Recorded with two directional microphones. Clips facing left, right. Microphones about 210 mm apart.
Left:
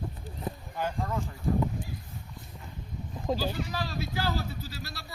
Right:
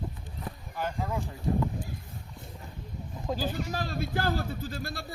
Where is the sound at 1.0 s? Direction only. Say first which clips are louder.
Even; 10° right (ahead or behind).